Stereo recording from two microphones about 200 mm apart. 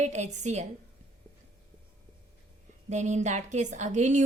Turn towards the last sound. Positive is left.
turn(degrees=-35)  # may be behind; listen again after turning